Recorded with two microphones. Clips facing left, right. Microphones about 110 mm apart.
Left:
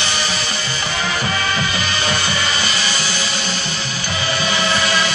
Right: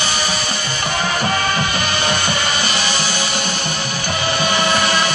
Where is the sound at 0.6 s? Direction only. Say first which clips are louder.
Right 3 dB; 55° right (ahead or behind).